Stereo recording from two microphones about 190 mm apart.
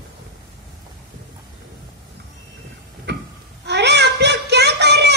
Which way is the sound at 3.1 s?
65° right (ahead or behind).